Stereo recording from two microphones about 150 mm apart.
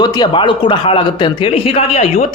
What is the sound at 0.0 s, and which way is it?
A man's voice, 30° left (ahead or behind).